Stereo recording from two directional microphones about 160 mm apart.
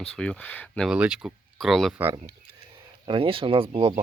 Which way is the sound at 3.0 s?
30° right (ahead or behind).